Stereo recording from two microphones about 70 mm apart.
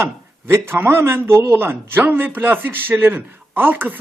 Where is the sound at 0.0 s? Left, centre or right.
Right.